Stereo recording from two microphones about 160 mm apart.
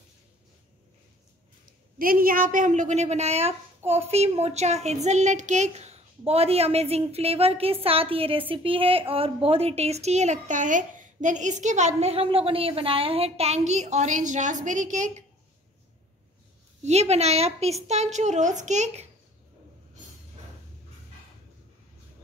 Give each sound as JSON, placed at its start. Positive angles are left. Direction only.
{"t": 1.7, "sound": "a woman's voice", "side_deg": -65}
{"t": 16.8, "sound": "a woman's voice", "side_deg": -40}